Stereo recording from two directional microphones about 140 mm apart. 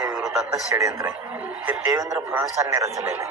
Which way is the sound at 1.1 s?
10° right (ahead or behind).